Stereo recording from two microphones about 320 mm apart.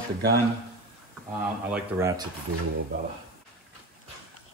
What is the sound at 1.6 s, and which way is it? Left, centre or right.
Speech, centre.